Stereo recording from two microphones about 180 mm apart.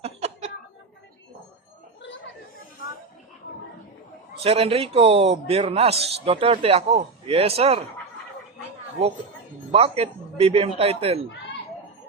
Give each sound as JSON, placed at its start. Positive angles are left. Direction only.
{"t": 0.0, "sound": "a sound", "side_deg": -35}
{"t": 4.4, "sound": "a man's voice", "side_deg": -30}
{"t": 9.7, "sound": "a man's voice", "side_deg": -35}